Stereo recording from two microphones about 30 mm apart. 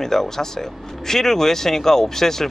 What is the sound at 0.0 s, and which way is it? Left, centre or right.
Speech, centre.